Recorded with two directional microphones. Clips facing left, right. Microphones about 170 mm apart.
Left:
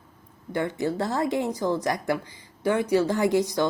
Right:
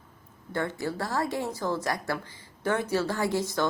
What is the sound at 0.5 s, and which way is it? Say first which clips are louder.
Speech: left 4 dB; 20° left (ahead or behind).